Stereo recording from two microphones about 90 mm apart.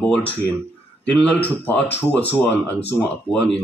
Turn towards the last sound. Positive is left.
turn(degrees=15)  # may be behind; listen again after turning